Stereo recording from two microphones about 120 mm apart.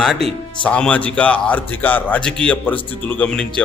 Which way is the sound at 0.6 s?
10° left (ahead or behind).